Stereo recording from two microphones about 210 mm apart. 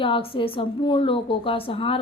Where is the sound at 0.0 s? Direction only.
25° left (ahead or behind).